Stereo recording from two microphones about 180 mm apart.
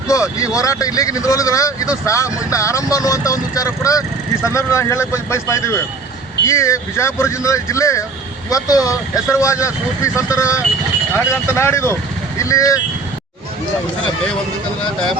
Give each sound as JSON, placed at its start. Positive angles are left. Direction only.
{"t": 0.1, "sound": "speech", "side_deg": 20}